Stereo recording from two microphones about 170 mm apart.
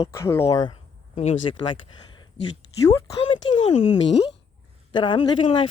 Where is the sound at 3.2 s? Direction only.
30° left (ahead or behind).